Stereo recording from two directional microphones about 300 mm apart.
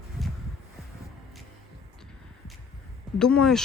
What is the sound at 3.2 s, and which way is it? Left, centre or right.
Speech, centre.